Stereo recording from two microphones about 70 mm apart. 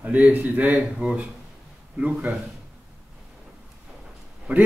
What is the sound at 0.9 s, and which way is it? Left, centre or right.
Speech, centre.